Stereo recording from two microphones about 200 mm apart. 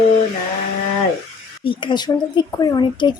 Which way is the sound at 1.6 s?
25° left (ahead or behind).